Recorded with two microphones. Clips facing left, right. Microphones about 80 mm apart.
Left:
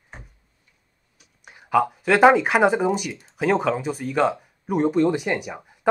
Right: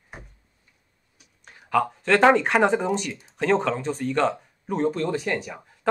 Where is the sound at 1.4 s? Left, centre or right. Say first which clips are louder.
Left 3 dB; centre.